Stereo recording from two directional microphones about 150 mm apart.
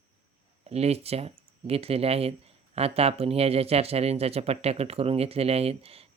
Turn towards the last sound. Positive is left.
turn(degrees=-40)  # may be behind; listen again after turning